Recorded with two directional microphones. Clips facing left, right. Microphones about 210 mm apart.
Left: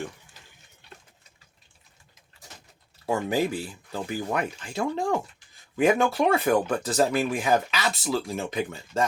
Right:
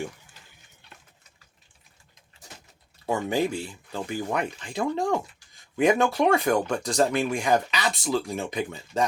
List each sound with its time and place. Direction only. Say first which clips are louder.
3.1 s speech: even; centre (ahead or behind)